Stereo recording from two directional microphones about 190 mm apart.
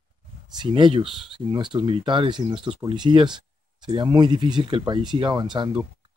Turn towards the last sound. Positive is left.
turn(degrees=-25)  # may be behind; listen again after turning